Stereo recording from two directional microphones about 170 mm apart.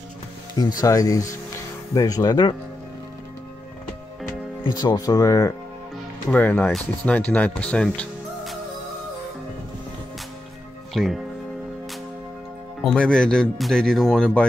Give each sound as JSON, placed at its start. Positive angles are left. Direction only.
{"t": 0.7, "sound": "speech", "side_deg": 20}
{"t": 4.6, "sound": "speech", "side_deg": 25}
{"t": 10.9, "sound": "speech", "side_deg": 0}
{"t": 12.8, "sound": "speech", "side_deg": 5}